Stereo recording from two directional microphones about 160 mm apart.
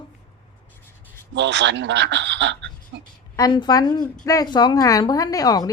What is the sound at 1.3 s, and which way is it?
A man's voice, 90° right.